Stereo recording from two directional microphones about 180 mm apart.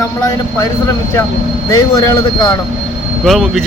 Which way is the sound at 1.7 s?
20° left (ahead or behind).